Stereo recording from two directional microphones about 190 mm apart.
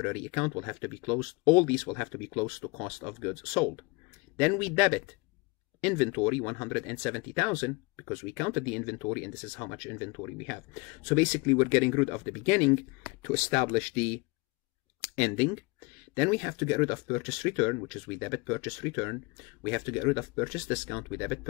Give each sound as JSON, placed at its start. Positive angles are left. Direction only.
{"t": 0.0, "sound": "speech", "side_deg": 5}